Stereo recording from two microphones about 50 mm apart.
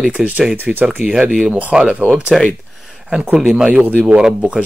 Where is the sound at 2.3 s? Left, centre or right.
Centre.